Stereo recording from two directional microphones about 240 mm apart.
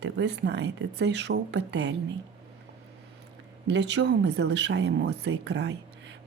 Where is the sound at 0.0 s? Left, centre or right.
Right.